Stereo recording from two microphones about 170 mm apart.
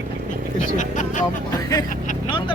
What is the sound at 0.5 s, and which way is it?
Speech, 45° left (ahead or behind).